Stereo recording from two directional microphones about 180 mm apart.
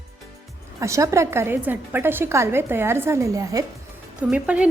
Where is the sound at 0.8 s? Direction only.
15° right (ahead or behind).